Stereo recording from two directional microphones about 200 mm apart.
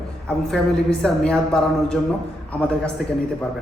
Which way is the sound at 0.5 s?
5° left (ahead or behind).